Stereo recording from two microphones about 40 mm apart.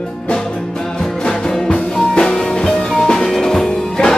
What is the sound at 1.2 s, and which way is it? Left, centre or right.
Music, left.